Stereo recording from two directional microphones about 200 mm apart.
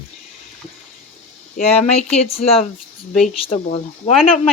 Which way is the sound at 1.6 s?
30° left (ahead or behind).